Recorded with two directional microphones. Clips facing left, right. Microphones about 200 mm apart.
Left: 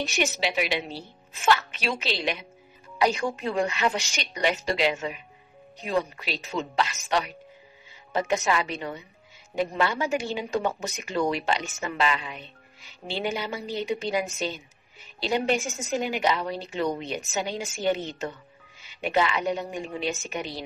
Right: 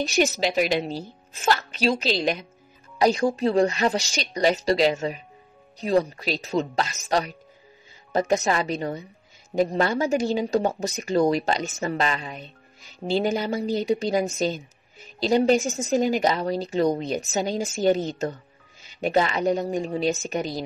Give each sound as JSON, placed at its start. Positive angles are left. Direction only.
{"t": 0.0, "sound": "speech", "side_deg": -40}